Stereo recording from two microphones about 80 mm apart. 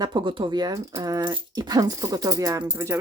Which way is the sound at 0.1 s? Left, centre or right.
Right.